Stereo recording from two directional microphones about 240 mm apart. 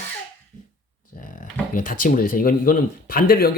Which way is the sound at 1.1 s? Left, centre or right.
Left.